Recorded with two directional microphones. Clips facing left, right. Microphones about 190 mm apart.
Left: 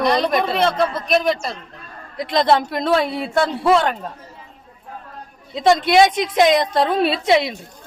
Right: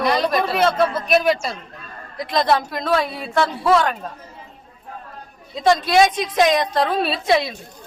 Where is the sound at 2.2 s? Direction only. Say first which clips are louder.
Left 2 dB; 25° left (ahead or behind).